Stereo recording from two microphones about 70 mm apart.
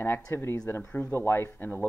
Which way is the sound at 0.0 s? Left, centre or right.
Left.